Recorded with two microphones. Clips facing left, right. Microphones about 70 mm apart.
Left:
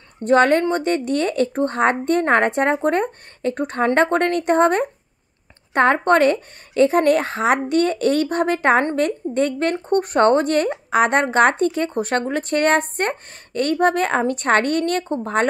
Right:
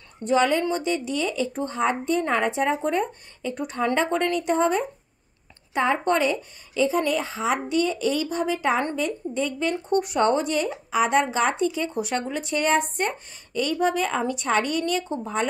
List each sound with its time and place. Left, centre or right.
0.2 s speech: left